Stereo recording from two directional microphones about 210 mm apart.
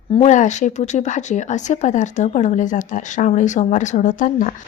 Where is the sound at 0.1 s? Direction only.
30° left (ahead or behind).